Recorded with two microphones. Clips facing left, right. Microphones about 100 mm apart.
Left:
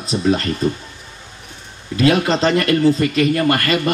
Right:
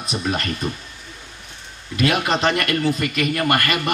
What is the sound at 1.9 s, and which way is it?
Speech, 30° left (ahead or behind).